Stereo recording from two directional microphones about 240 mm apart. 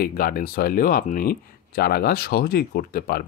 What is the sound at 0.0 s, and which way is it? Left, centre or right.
Speech, left.